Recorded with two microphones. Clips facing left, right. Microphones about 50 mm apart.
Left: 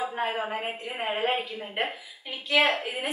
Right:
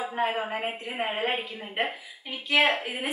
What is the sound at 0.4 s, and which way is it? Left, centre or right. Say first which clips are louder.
A woman's voice: even; centre.